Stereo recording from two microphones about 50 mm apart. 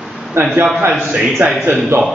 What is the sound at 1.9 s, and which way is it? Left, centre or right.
Speech, right.